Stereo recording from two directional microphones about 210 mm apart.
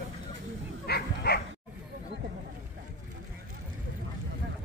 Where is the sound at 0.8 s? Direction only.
50° left (ahead or behind).